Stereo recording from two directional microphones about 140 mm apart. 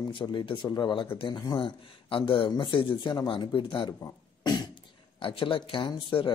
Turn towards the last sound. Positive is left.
turn(degrees=40)  # may be behind; listen again after turning